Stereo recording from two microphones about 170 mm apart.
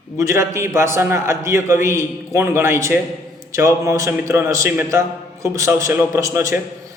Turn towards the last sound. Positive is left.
turn(degrees=-15)  # may be behind; listen again after turning